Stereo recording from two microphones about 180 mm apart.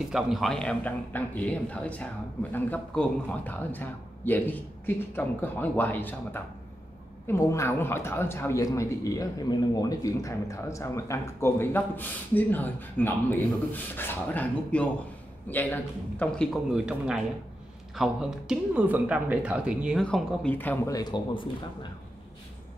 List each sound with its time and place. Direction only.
0.1 s speech: centre (ahead or behind)
16.7 s speech: 5° right (ahead or behind); by 21.5 s 25° left (ahead or behind)